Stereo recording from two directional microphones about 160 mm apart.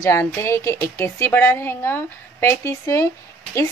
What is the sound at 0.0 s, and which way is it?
A woman's voice, 15° left (ahead or behind).